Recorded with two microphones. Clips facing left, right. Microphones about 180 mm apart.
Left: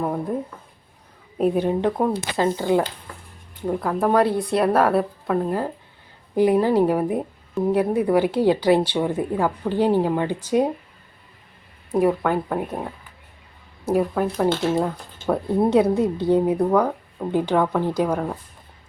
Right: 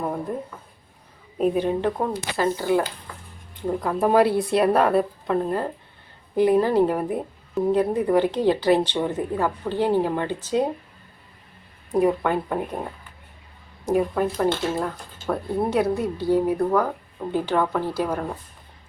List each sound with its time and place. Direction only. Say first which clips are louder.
0.0 s a sound: left 3 dB; centre (ahead or behind)
1.4 s a woman's voice: left 1 dB; 10° left (ahead or behind)
2.3 s speech: right 1 dB; 20° left (ahead or behind)
3.8 s a woman's voice: right 1 dB; centre (ahead or behind)
11.9 s speech: left 1 dB; 5° left (ahead or behind)
14.8 s a woman's voice: left 4 dB; 20° left (ahead or behind)